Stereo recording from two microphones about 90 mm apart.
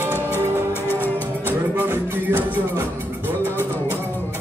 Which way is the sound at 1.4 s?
25° right (ahead or behind).